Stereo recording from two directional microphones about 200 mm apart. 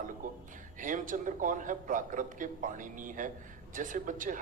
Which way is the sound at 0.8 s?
40° right (ahead or behind).